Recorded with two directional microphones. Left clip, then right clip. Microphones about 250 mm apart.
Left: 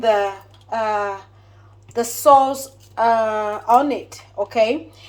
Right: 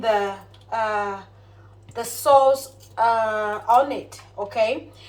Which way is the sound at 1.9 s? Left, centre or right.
Left.